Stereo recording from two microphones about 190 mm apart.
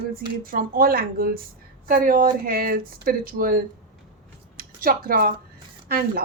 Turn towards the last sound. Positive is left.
turn(degrees=-50)  # may be behind; listen again after turning